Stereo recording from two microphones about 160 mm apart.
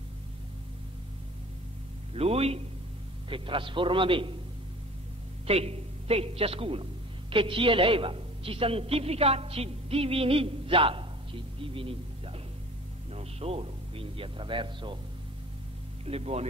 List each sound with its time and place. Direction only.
2.1 s a man's voice: 40° right (ahead or behind)
5.5 s a man's voice: 40° right (ahead or behind)
16.1 s a man's voice: 40° right (ahead or behind)